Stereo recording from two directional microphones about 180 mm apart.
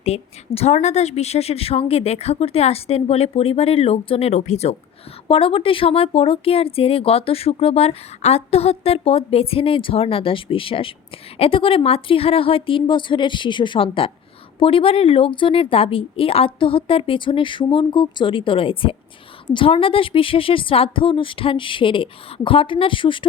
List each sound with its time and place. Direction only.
0.0 s a woman's voice: 35° left (ahead or behind)